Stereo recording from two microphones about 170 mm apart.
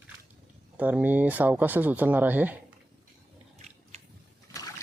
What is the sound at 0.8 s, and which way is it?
Speech, 10° right (ahead or behind).